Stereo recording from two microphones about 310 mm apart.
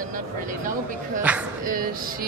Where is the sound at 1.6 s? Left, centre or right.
Right.